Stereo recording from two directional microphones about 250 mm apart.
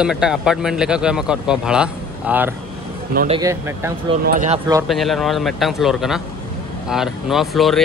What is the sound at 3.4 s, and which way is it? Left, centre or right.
Speech, centre.